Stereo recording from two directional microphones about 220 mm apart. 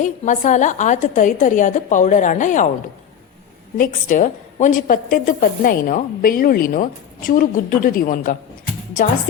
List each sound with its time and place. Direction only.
0.0 s a woman's voice: 35° left (ahead or behind)
3.8 s a woman's voice: 35° left (ahead or behind)